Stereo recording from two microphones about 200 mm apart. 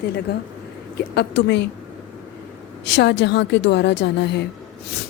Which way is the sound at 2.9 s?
60° left (ahead or behind).